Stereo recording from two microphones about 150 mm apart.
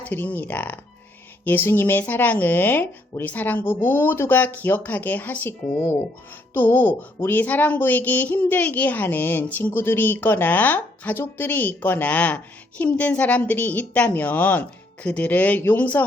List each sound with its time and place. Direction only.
0.0 s speech: 10° left (ahead or behind)